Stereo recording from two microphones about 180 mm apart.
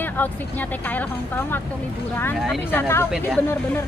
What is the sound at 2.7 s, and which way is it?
Speech, 15° left (ahead or behind).